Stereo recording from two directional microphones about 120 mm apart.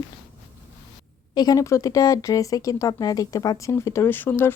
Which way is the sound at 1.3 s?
35° left (ahead or behind).